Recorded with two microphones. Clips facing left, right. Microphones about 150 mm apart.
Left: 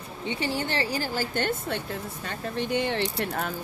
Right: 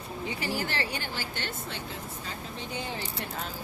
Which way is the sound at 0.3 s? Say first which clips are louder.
Left 4 dB; 30° left (ahead or behind).